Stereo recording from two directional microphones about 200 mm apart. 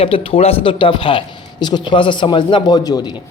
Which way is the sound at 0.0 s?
30° left (ahead or behind).